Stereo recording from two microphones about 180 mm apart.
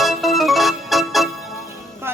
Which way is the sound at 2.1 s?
10° right (ahead or behind).